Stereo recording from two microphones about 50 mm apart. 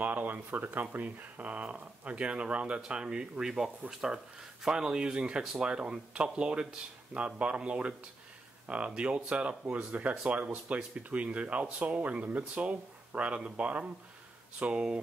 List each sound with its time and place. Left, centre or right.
0.0 s speech: right